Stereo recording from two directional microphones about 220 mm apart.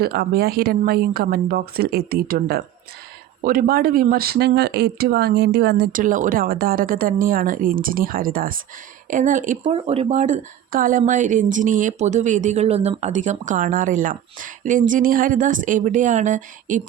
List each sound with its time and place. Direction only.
0.0 s speech: 45° right (ahead or behind)